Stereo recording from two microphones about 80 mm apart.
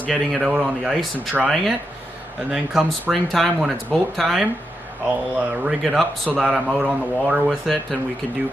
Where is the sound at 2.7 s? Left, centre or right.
Centre.